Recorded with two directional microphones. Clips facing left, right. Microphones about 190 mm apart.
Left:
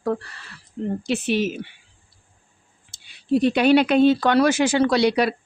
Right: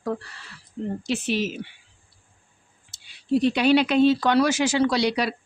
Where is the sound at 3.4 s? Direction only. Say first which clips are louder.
Left 3 dB; 55° left (ahead or behind).